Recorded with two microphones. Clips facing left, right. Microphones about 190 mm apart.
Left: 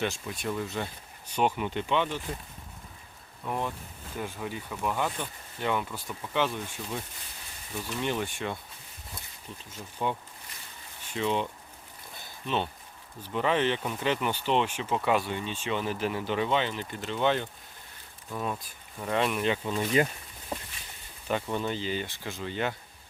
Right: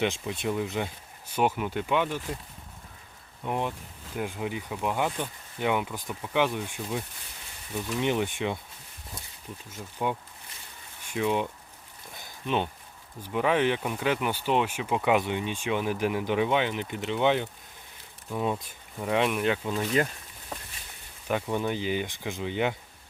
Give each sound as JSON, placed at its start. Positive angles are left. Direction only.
{"t": 0.0, "sound": "speech", "side_deg": -20}
{"t": 3.4, "sound": "speech", "side_deg": -15}
{"t": 8.0, "sound": "speech", "side_deg": -15}
{"t": 9.7, "sound": "speech", "side_deg": -10}
{"t": 12.2, "sound": "a sound", "side_deg": -15}
{"t": 13.2, "sound": "speech", "side_deg": -10}
{"t": 18.9, "sound": "speech", "side_deg": -10}
{"t": 19.8, "sound": "speech", "side_deg": 10}
{"t": 21.2, "sound": "speech", "side_deg": -10}